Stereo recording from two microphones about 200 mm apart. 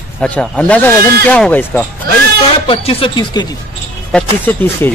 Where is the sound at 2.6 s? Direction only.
30° left (ahead or behind).